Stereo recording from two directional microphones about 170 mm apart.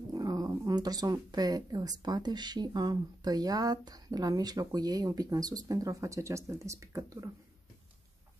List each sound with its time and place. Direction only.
0.1 s speech: 20° right (ahead or behind)